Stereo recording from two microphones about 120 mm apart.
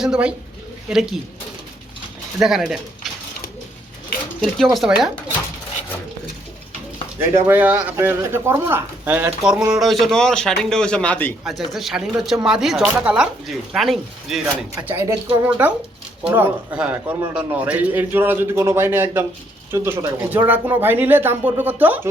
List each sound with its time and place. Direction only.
0.0 s a man's voice: 10° right (ahead or behind)
2.4 s speech: 5° right (ahead or behind)
4.4 s speech: centre (ahead or behind)
7.2 s speech: 15° right (ahead or behind)
9.7 s speech: centre (ahead or behind)
11.4 s speech: centre (ahead or behind)
15.0 s speech: 25° right (ahead or behind)
15.4 s a man's voice: 15° right (ahead or behind)